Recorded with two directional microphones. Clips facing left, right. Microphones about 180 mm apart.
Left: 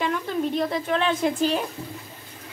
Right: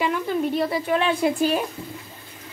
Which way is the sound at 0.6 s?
5° right (ahead or behind).